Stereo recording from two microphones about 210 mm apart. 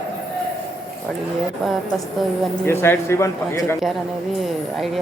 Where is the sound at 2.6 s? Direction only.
10° left (ahead or behind).